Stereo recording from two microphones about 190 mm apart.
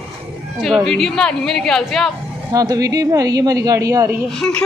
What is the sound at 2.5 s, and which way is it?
A woman's voice, 20° right (ahead or behind).